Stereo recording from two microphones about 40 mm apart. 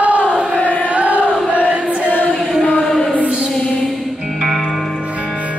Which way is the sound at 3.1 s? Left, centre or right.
Right.